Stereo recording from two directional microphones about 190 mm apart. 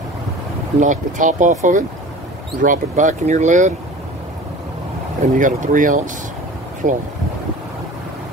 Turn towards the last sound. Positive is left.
turn(degrees=-40)  # may be behind; listen again after turning